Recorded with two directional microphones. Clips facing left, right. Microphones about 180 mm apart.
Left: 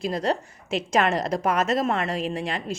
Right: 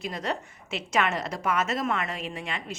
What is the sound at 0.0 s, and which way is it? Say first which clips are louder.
Speech: left 6 dB; 35° left (ahead or behind).